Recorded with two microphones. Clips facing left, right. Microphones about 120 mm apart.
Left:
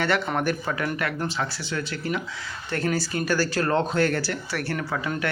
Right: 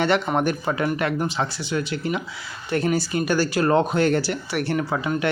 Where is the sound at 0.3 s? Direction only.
20° right (ahead or behind).